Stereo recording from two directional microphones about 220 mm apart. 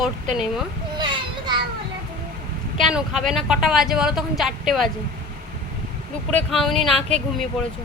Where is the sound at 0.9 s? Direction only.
20° right (ahead or behind).